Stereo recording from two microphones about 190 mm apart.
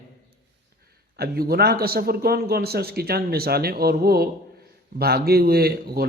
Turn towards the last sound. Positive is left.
turn(degrees=-55)  # may be behind; listen again after turning